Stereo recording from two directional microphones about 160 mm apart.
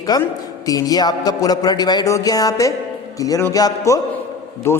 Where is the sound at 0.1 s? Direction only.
25° left (ahead or behind).